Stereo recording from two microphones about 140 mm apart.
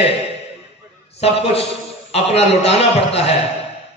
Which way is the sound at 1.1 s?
45° left (ahead or behind).